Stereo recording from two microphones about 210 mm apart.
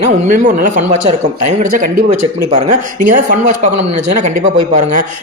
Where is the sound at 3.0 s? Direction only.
40° right (ahead or behind).